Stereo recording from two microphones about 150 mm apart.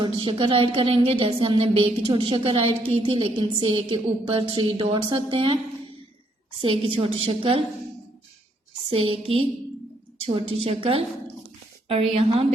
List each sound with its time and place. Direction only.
0.0 s a woman's voice: 35° right (ahead or behind)
6.6 s a woman's voice: 35° right (ahead or behind)
8.9 s a woman's voice: 40° right (ahead or behind)
12.1 s a woman's voice: 40° right (ahead or behind)